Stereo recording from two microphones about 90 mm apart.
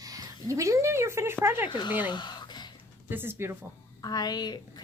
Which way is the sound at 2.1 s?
55° left (ahead or behind).